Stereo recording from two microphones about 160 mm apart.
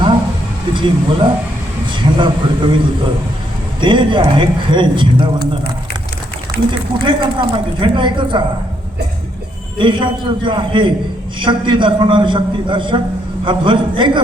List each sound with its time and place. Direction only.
0.7 s a man's voice: 30° right (ahead or behind)
3.8 s a man's voice: 30° right (ahead or behind)
6.7 s speech: 30° right (ahead or behind)
9.7 s speech: 30° right (ahead or behind)